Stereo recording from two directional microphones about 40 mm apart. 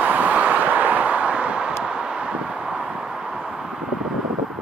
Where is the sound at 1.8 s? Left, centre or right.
Centre.